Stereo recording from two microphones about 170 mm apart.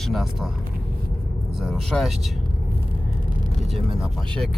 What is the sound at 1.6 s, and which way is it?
Speech, centre (ahead or behind).